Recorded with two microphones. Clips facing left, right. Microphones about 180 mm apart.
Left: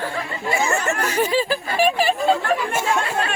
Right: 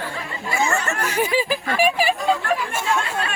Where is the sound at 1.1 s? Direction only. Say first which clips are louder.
Even; 15° right (ahead or behind).